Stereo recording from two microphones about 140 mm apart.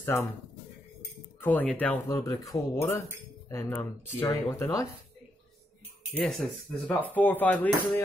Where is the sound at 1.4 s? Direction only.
10° left (ahead or behind).